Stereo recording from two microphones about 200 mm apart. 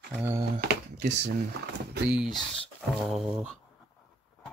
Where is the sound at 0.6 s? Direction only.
50° right (ahead or behind).